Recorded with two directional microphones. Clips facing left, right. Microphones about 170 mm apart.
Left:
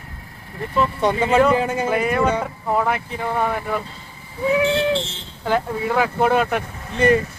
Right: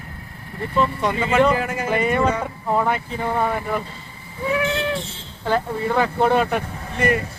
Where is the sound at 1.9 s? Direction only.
Centre (ahead or behind).